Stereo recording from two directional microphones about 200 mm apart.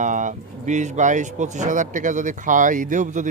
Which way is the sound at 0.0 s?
40° right (ahead or behind).